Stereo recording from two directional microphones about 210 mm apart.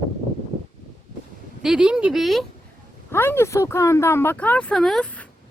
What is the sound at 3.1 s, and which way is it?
Speech, 10° left (ahead or behind).